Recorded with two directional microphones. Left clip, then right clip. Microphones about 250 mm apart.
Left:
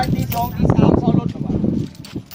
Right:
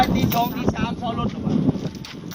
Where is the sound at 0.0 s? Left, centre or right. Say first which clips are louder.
Right 2 dB; left.